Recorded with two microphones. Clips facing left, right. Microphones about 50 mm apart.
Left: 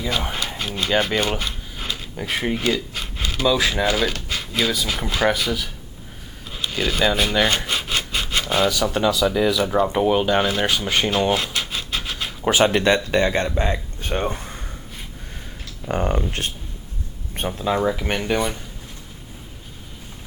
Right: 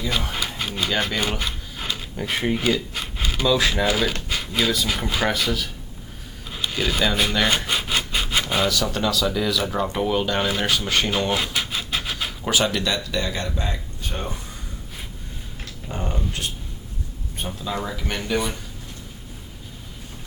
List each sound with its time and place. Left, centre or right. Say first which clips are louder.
0.4 s a sound: left 1 dB; centre
3.5 s speech: right 1 dB; centre
6.5 s rub: left 1 dB; centre
8.7 s speech: left 3 dB; centre
11.2 s scratch: left 3 dB; centre
12.5 s speech: left 6 dB; left
15.9 s speech: left 7 dB; left